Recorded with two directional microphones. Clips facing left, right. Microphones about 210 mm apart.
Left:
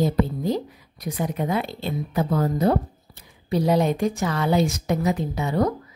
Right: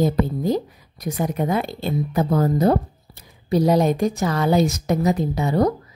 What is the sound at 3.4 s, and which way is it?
A woman's voice, 40° right (ahead or behind).